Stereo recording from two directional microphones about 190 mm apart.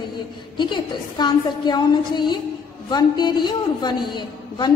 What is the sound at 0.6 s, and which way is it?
A man's voice, 25° left (ahead or behind).